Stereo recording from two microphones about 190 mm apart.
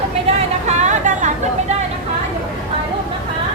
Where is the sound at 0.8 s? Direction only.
40° right (ahead or behind).